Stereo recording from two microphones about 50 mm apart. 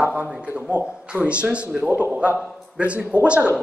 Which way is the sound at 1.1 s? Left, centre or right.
Right.